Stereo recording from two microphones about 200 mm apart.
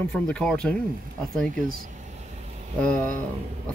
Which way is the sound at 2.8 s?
5° left (ahead or behind).